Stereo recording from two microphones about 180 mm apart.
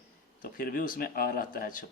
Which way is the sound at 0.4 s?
50° left (ahead or behind).